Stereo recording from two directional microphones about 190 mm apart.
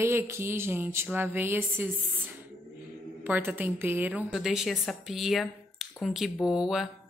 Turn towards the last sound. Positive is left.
turn(degrees=0)  # may be behind; listen again after turning